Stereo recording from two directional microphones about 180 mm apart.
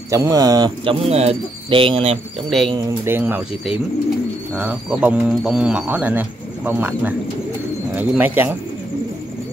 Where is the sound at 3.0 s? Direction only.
10° right (ahead or behind).